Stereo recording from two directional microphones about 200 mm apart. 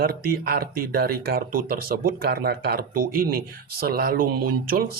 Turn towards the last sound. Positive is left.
turn(degrees=-45)  # may be behind; listen again after turning